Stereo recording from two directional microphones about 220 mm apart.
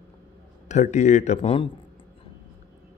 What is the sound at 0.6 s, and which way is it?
Speech, 35° left (ahead or behind).